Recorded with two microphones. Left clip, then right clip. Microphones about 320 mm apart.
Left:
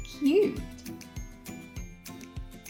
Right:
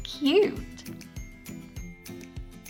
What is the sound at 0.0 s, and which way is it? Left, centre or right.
Music, right.